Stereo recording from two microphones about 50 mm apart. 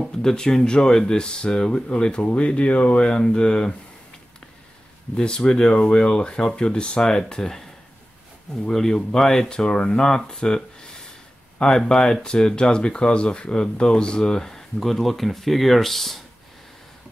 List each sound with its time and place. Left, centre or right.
0.2 s speech: centre
5.1 s speech: centre
8.6 s speech: centre